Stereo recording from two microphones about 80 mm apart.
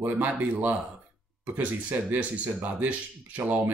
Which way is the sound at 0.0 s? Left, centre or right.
Right.